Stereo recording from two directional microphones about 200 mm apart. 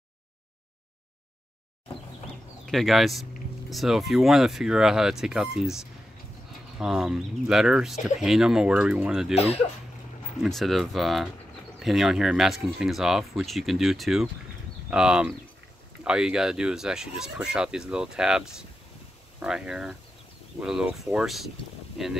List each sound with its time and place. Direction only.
2.6 s speech: centre (ahead or behind)
6.8 s speech: 5° right (ahead or behind)
9.3 s speech: 30° left (ahead or behind)
10.4 s speech: centre (ahead or behind)